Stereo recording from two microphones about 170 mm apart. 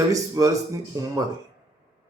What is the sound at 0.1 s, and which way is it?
A man's voice, 20° right (ahead or behind).